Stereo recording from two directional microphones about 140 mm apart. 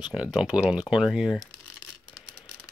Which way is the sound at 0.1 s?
5° right (ahead or behind).